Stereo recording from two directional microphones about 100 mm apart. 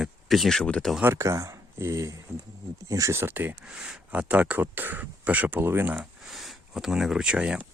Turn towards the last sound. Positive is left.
turn(degrees=-10)  # may be behind; listen again after turning